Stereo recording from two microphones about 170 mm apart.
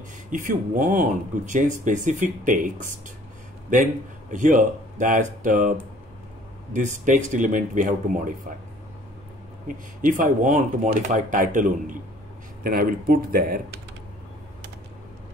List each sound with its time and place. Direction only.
0.3 s speech: 50° right (ahead or behind)
4.3 s speech: 50° right (ahead or behind)
9.7 s speech: 50° right (ahead or behind)